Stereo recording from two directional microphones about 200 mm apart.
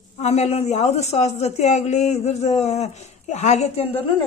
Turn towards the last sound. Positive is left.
turn(degrees=30)  # may be behind; listen again after turning